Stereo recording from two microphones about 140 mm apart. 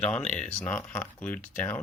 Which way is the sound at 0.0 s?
5° left (ahead or behind).